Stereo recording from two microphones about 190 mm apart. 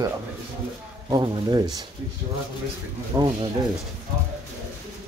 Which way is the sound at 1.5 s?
20° right (ahead or behind).